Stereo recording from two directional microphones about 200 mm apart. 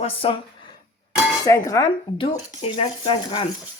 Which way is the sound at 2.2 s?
30° left (ahead or behind).